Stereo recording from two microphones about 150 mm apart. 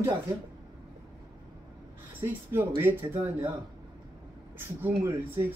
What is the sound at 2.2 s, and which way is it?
Speech, 15° right (ahead or behind).